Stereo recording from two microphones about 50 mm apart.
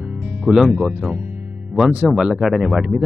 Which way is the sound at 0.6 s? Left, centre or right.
Centre.